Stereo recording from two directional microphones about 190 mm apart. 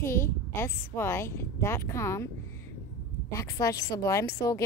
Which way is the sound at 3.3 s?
15° left (ahead or behind).